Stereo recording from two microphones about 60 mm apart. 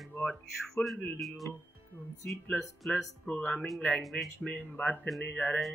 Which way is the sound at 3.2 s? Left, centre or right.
Centre.